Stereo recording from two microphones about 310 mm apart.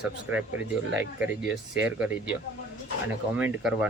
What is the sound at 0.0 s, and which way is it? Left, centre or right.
Speech, centre.